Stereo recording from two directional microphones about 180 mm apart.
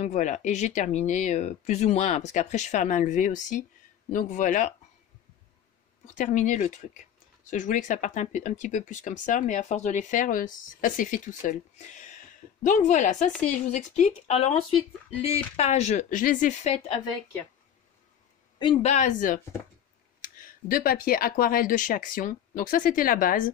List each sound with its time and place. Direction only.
0.0 s speech: 40° left (ahead or behind)
6.1 s speech: 45° left (ahead or behind)
18.6 s speech: 30° left (ahead or behind)
18.9 s speech: 40° left (ahead or behind)